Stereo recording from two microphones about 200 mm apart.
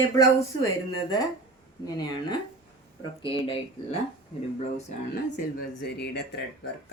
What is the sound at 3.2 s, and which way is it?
Speech, 25° left (ahead or behind).